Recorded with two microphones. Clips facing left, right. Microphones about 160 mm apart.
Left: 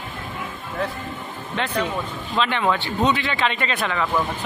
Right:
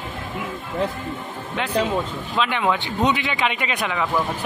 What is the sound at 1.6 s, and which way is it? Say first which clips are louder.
A man's voice: right 3 dB; 10° right (ahead or behind).